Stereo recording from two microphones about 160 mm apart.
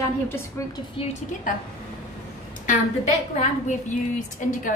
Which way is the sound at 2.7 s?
55° left (ahead or behind).